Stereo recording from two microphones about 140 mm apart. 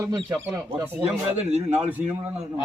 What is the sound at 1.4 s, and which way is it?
Speech, 55° right (ahead or behind).